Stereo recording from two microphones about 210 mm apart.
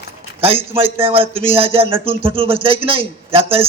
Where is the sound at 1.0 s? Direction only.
25° right (ahead or behind).